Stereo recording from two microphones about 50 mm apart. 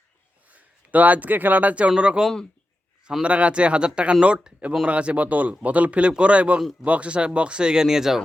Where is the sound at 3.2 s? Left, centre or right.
Right; by 8.2 s centre.